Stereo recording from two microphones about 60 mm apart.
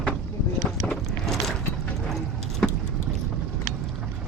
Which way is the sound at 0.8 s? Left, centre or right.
Centre.